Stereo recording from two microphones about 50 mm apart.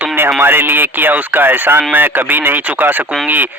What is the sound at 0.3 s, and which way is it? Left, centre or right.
A man's voice, right.